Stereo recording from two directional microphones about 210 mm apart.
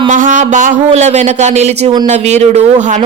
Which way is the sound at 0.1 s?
35° right (ahead or behind).